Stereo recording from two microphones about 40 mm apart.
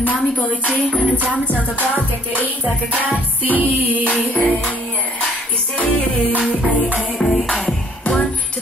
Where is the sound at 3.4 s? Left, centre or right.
Right.